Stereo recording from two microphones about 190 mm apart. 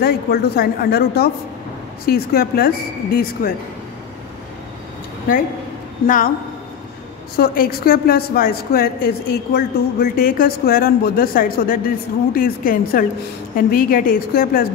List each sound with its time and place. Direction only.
0.0 s a woman's voice: 55° left (ahead or behind)
6.0 s a woman's voice: 45° left (ahead or behind)
7.3 s a woman's voice: 50° left (ahead or behind)